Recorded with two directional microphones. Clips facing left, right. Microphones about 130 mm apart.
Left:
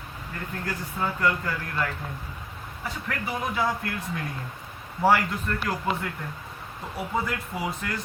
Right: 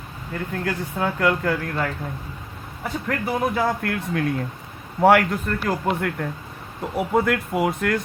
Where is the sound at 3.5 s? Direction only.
60° right (ahead or behind).